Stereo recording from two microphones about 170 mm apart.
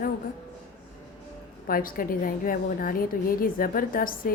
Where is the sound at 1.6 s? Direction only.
55° left (ahead or behind).